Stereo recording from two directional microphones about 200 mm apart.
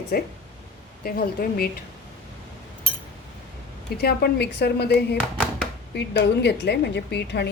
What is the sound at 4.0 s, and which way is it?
A woman's voice, 50° left (ahead or behind).